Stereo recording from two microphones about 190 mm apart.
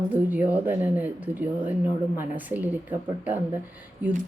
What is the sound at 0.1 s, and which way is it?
Speech, 10° right (ahead or behind).